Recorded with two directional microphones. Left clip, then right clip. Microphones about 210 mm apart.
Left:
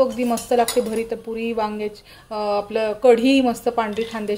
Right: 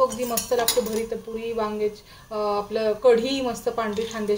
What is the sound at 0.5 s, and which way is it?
Speech, 45° left (ahead or behind).